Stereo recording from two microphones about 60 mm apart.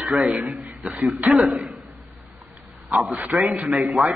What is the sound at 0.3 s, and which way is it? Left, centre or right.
A man's voice, right.